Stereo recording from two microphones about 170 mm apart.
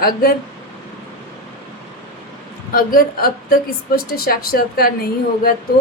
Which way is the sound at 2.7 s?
60° left (ahead or behind).